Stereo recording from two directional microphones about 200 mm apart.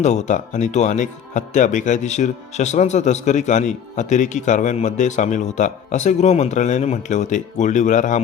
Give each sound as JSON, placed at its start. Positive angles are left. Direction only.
{"t": 0.0, "sound": "speech", "side_deg": 35}